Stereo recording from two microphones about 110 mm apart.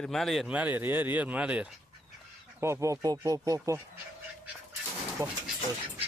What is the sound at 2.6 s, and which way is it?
Speech, 25° right (ahead or behind).